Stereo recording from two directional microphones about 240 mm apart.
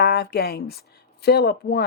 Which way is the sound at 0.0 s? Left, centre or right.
Left.